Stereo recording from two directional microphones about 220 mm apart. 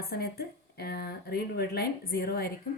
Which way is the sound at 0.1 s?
45° left (ahead or behind).